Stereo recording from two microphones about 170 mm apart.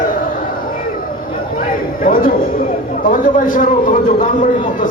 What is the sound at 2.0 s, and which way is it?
A man's voice, 55° left (ahead or behind).